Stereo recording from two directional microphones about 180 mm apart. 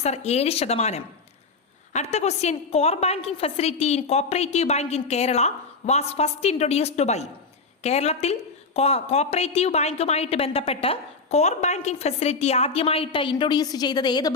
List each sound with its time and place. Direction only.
0.0 s a woman's voice: 35° left (ahead or behind)